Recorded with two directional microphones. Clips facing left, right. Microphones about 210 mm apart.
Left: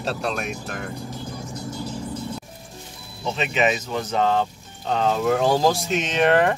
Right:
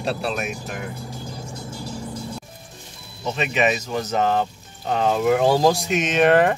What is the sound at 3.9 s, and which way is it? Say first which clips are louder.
Speech: even; 10° right (ahead or behind).